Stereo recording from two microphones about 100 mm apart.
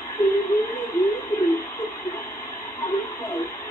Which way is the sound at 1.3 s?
40° left (ahead or behind).